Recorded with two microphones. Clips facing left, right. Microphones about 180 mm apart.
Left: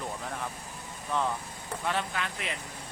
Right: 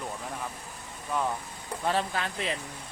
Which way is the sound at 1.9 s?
35° right (ahead or behind).